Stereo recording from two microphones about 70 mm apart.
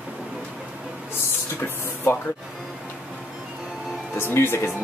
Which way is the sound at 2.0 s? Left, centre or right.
Left.